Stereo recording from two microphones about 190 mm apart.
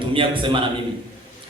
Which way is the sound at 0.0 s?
25° right (ahead or behind).